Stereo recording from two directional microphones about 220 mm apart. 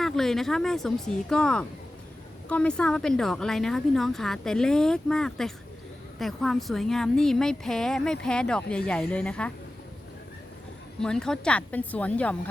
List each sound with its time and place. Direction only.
0.0 s a woman's voice: centre (ahead or behind)
11.0 s a woman's voice: 5° left (ahead or behind)